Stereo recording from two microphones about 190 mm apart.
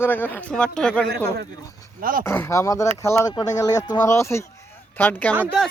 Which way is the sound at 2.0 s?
50° right (ahead or behind).